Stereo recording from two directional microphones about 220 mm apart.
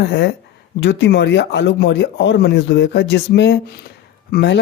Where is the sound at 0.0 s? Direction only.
50° left (ahead or behind).